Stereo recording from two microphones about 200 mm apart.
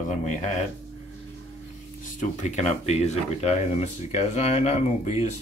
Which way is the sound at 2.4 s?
35° left (ahead or behind).